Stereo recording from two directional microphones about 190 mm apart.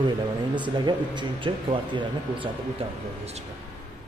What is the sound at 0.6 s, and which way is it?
Speech, 25° right (ahead or behind).